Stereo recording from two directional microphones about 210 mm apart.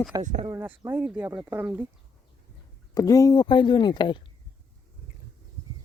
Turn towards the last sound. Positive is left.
turn(degrees=20)  # may be behind; listen again after turning